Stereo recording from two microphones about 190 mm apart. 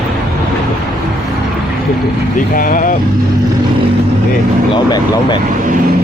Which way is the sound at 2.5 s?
45° left (ahead or behind).